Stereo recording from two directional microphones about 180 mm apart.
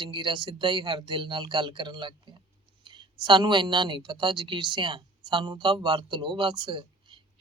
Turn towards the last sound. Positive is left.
turn(degrees=-25)  # may be behind; listen again after turning